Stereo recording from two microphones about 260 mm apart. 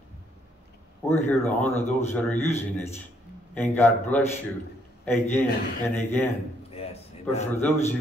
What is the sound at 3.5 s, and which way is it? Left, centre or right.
A man's voice, centre.